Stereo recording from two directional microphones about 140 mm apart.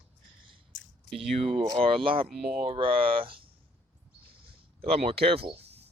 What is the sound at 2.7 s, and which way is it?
Speech, 40° right (ahead or behind).